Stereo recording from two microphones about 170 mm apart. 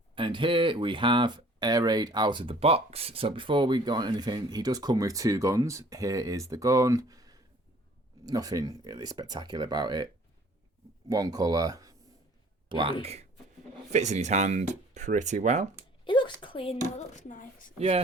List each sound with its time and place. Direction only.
0.2 s speech: 30° right (ahead or behind)
11.1 s speech: 20° right (ahead or behind); by 15.7 s 45° right (ahead or behind)
16.0 s speech: 30° left (ahead or behind); by 17.7 s 50° left (ahead or behind)
17.7 s speech: 35° right (ahead or behind)